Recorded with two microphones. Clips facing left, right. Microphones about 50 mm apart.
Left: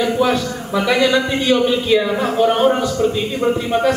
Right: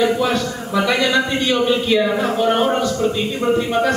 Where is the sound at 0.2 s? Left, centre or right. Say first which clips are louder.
Left 2 dB; centre.